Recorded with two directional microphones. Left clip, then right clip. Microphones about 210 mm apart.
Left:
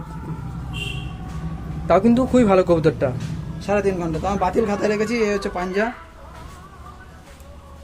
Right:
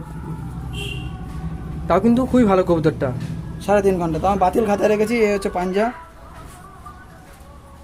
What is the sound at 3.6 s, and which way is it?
A man's voice, 45° right (ahead or behind).